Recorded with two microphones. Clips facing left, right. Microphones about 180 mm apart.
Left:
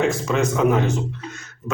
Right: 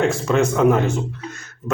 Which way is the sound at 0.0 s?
Centre (ahead or behind).